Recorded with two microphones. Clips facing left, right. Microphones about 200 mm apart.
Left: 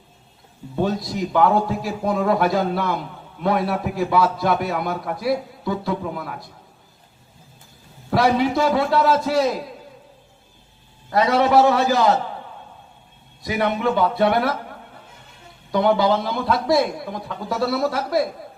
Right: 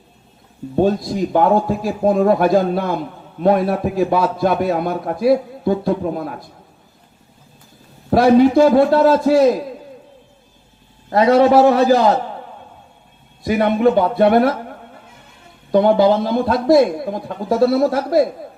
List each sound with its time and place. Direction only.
0.8 s a man's voice: 50° right (ahead or behind)
8.1 s a man's voice: 45° right (ahead or behind)
11.1 s a man's voice: 45° right (ahead or behind)
13.4 s a man's voice: 45° right (ahead or behind)
15.7 s a man's voice: 50° right (ahead or behind)